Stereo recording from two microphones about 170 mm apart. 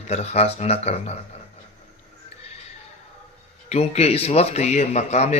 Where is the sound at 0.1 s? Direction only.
40° left (ahead or behind).